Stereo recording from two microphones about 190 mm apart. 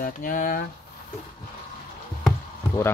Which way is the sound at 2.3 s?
15° left (ahead or behind).